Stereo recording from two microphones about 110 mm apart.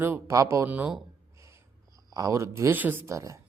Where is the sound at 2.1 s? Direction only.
35° right (ahead or behind).